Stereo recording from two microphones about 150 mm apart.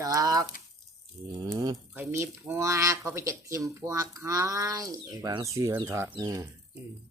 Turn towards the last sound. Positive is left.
turn(degrees=-20)  # may be behind; listen again after turning